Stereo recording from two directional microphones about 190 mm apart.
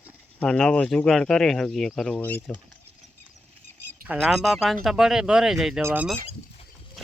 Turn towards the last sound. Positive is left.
turn(degrees=-10)  # may be behind; listen again after turning